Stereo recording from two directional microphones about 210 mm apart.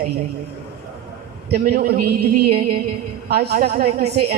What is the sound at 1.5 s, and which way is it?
A man's voice, 50° right (ahead or behind).